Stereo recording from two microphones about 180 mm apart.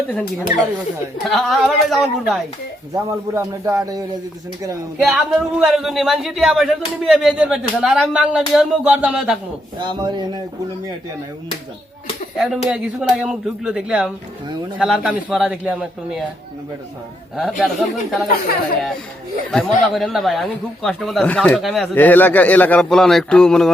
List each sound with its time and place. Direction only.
0.1 s speech: 10° left (ahead or behind)
2.9 s a man's voice: 15° right (ahead or behind)
5.1 s speech: centre (ahead or behind)
9.7 s a man's voice: 25° right (ahead or behind)
12.4 s speech: 5° right (ahead or behind)
17.6 s speech: centre (ahead or behind)
18.3 s speech: 55° left (ahead or behind)
19.5 s speech: centre (ahead or behind)